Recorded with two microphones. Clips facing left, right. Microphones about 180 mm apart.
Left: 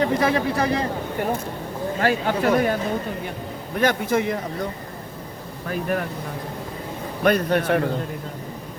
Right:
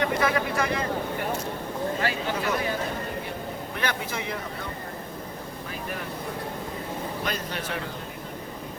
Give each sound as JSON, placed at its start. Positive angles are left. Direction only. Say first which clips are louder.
{"t": 0.0, "sound": "speech", "louder": "left 5 dB", "side_deg": 30}
{"t": 2.0, "sound": "speech", "louder": "left 7 dB", "side_deg": 50}
{"t": 3.8, "sound": "speech", "louder": "left 11 dB", "side_deg": 50}
{"t": 5.6, "sound": "a man's voice", "louder": "left 12 dB", "side_deg": 55}
{"t": 7.3, "sound": "a man's voice", "louder": "left 12 dB", "side_deg": 60}